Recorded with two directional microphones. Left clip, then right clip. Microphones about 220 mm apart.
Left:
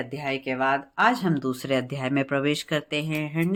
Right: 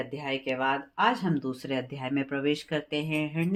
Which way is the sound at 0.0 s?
30° left (ahead or behind).